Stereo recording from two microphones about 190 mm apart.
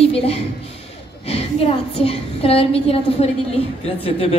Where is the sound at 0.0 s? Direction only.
30° left (ahead or behind).